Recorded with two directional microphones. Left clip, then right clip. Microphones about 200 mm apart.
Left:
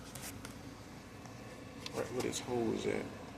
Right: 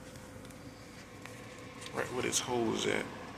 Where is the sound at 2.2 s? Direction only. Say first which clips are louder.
Right 4 dB; centre (ahead or behind).